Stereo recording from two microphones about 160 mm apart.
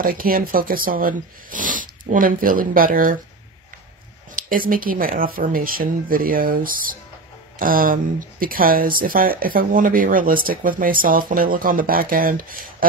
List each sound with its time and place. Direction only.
0.0 s speech: 65° right (ahead or behind)
4.5 s speech: 60° right (ahead or behind)